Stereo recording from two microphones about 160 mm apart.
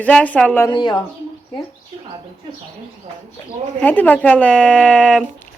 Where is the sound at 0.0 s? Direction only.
10° left (ahead or behind).